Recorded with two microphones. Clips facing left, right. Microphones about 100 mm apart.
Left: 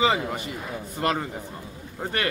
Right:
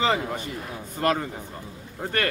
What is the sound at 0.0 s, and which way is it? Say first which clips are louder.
Speech: left 1 dB; 5° left (ahead or behind).